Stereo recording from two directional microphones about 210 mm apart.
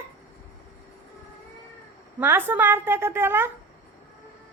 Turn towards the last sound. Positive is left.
turn(degrees=-10)  # may be behind; listen again after turning